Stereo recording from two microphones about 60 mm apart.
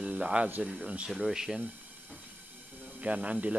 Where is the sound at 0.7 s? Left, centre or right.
Centre.